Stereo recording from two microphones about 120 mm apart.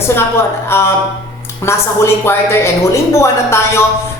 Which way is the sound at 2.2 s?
20° left (ahead or behind).